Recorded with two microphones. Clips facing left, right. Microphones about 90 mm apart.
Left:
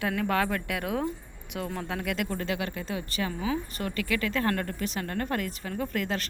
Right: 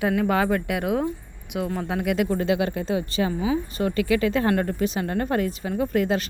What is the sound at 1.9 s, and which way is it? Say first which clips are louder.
Speech: right 9 dB; 15° right (ahead or behind).